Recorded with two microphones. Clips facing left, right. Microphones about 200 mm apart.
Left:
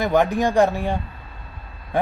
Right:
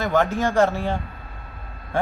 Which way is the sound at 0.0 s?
15° left (ahead or behind).